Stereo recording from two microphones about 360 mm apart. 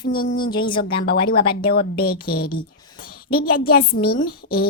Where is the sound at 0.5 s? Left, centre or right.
Centre.